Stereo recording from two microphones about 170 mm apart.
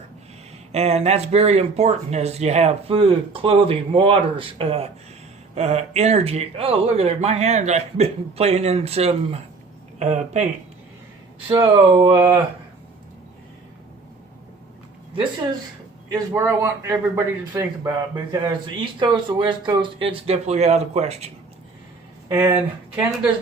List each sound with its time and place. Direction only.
0.7 s speech: 40° right (ahead or behind)
11.6 s a man's voice: 30° right (ahead or behind)
16.1 s a man's voice: 20° right (ahead or behind); by 21.2 s 40° right (ahead or behind)
22.3 s speech: 15° right (ahead or behind)